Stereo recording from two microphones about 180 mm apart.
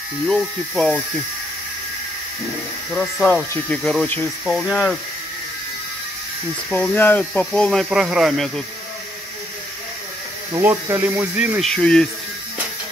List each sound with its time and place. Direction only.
0.3 s speech: centre (ahead or behind)
2.9 s speech: centre (ahead or behind)
6.7 s speech: 10° left (ahead or behind)
10.5 s speech: 15° right (ahead or behind)
11.7 s speech: 5° left (ahead or behind)